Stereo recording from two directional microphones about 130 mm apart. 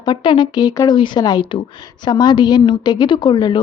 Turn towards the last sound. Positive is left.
turn(degrees=35)  # may be behind; listen again after turning